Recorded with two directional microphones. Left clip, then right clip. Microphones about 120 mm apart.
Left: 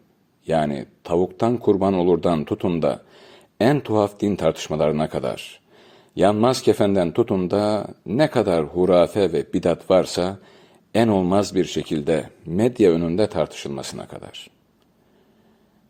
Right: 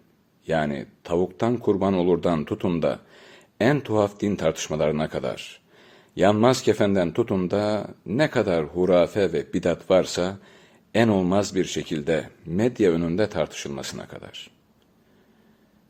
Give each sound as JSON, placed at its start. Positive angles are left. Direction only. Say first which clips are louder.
{"t": 0.4, "sound": "speech", "louder": "left 3 dB", "side_deg": 40}